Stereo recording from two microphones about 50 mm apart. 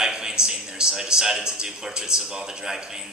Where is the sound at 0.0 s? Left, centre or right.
Centre.